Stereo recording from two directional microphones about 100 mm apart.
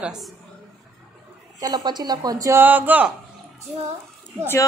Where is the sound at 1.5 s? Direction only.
40° right (ahead or behind).